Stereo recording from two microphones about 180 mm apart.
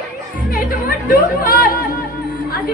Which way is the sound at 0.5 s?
50° left (ahead or behind).